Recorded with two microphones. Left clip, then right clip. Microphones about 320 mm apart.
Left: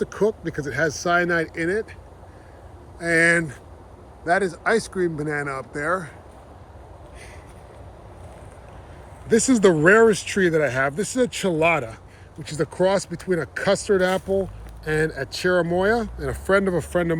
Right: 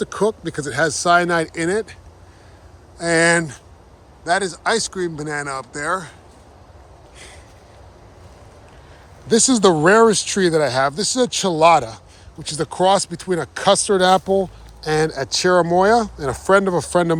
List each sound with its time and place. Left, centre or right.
0.0 s speech: centre
3.0 s speech: centre
9.5 s speech: centre